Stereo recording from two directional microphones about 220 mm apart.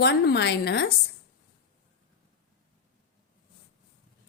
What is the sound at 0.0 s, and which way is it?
Speech, 50° left (ahead or behind).